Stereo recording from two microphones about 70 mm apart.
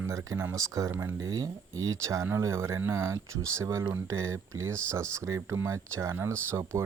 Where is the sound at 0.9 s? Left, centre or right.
Right.